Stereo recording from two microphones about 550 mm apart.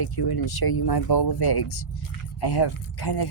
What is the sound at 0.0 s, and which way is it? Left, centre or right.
Speech, left.